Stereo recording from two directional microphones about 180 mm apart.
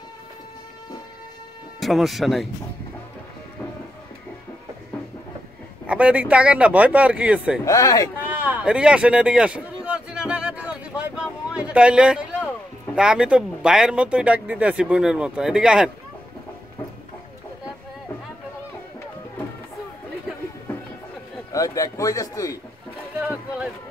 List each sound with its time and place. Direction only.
1.8 s speech: centre (ahead or behind)
5.9 s speech: 5° right (ahead or behind)
7.6 s speech: 20° left (ahead or behind)
8.3 s a sound: 10° right (ahead or behind)
12.9 s speech: 5° right (ahead or behind)
21.5 s speech: 20° left (ahead or behind)